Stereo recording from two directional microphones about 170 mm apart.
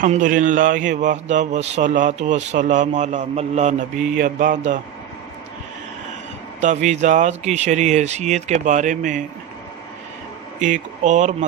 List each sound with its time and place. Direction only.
0.0 s a man's voice: 50° right (ahead or behind)
6.6 s a man's voice: 45° right (ahead or behind)
10.6 s a man's voice: 45° right (ahead or behind)